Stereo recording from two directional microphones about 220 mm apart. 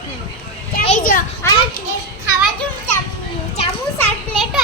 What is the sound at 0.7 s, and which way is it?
Children playing, 35° left (ahead or behind).